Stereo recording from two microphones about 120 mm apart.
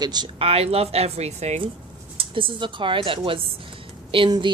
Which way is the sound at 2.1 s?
45° right (ahead or behind).